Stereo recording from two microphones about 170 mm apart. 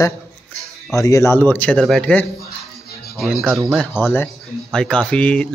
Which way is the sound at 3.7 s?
10° left (ahead or behind).